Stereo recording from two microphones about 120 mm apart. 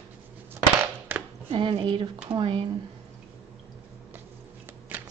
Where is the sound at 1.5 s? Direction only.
45° right (ahead or behind).